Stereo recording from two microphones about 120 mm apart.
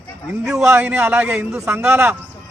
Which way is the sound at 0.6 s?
15° right (ahead or behind).